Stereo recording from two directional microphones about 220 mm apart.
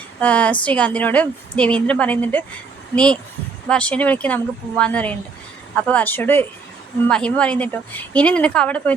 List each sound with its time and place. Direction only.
0.2 s a woman's voice: 5° left (ahead or behind)